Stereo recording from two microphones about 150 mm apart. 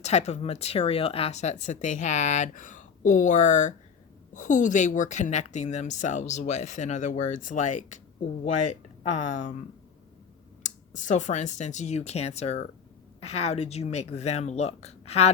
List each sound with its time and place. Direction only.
0.0 s speech: 45° left (ahead or behind)
9.1 s speech: 55° left (ahead or behind)
10.6 s speech: 55° left (ahead or behind)